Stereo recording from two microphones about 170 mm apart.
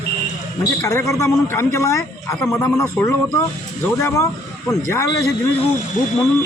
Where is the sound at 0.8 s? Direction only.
20° left (ahead or behind).